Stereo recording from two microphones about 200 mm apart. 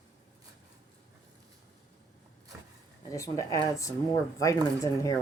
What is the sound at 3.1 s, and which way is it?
Speech, 15° left (ahead or behind).